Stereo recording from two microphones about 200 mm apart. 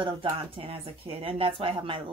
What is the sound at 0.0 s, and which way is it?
Speech, 25° right (ahead or behind).